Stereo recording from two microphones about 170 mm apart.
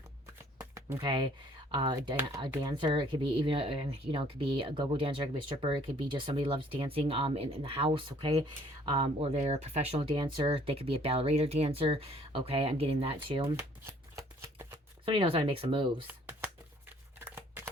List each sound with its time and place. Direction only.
0.6 s a sound: 15° right (ahead or behind)
1.7 s speech: 25° right (ahead or behind)
13.8 s shuffling cards: 15° right (ahead or behind)
15.0 s speech: 30° right (ahead or behind)
16.0 s shuffling cards: 10° right (ahead or behind)
17.2 s crumpling: 10° right (ahead or behind)